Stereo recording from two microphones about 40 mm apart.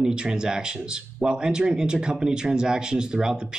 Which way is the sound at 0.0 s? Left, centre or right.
Right.